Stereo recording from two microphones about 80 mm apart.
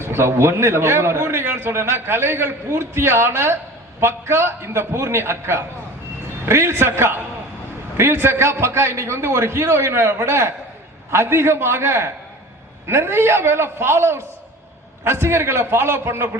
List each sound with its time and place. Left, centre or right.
0.0 s a man's voice: right